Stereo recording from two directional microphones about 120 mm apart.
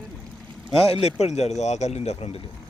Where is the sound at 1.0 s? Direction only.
65° left (ahead or behind).